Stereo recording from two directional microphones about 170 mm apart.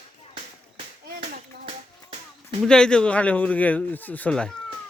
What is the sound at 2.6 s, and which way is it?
A man's voice, 5° left (ahead or behind).